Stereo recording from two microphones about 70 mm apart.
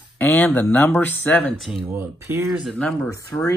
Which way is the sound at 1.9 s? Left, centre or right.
Right.